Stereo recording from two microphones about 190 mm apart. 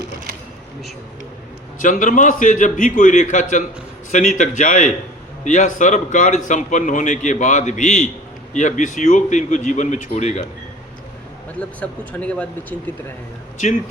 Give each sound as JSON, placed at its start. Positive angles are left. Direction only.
{"t": 1.8, "sound": "a man's voice", "side_deg": 40}
{"t": 11.8, "sound": "speech", "side_deg": 5}